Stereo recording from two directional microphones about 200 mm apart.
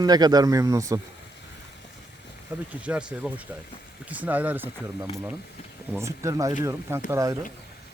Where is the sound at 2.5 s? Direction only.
10° right (ahead or behind).